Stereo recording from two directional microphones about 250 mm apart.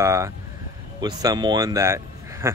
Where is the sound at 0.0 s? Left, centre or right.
Centre.